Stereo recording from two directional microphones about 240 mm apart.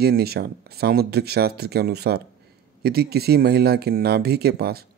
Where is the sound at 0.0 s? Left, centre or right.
Right.